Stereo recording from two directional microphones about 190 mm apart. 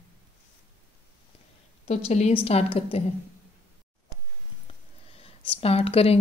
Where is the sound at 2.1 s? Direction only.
35° left (ahead or behind).